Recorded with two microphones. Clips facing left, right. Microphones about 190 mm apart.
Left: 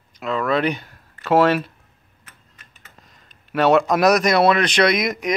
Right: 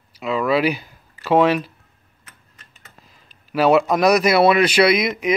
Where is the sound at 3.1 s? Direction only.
5° right (ahead or behind).